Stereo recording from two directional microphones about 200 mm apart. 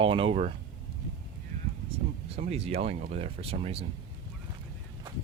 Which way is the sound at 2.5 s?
30° right (ahead or behind).